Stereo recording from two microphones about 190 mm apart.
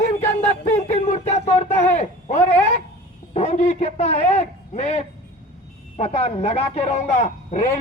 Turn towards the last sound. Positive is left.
turn(degrees=40)  # may be behind; listen again after turning